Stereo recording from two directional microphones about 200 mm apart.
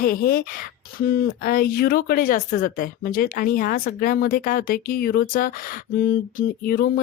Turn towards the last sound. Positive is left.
turn(degrees=45)  # may be behind; listen again after turning